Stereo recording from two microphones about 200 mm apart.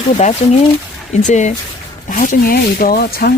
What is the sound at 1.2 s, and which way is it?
Speech, 35° left (ahead or behind).